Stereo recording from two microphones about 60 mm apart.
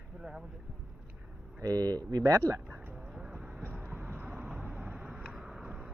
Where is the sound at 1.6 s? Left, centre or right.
Right.